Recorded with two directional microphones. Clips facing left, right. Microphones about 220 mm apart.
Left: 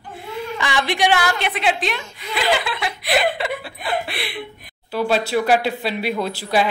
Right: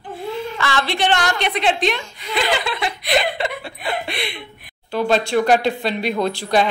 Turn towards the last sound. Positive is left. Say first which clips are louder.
# right 2 dB
turn(degrees=5)  # may be behind; listen again after turning